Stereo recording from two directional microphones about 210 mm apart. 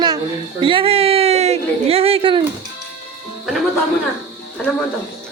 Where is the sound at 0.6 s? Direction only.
25° right (ahead or behind).